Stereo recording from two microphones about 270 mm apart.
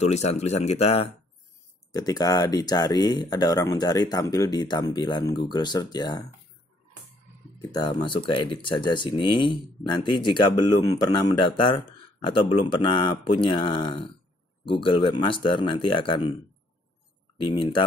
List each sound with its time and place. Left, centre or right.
0.0 s speech: left
7.5 s speech: centre
17.4 s speech: centre